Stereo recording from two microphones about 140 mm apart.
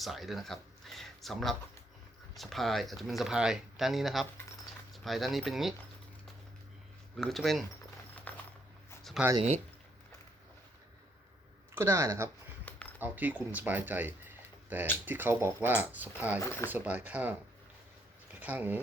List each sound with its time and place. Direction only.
0.0 s speech: centre (ahead or behind)
7.2 s speech: centre (ahead or behind)
8.3 s a sound: 10° left (ahead or behind)
9.2 s speech: centre (ahead or behind)
11.7 s speech: 20° right (ahead or behind)
18.3 s speech: 10° right (ahead or behind)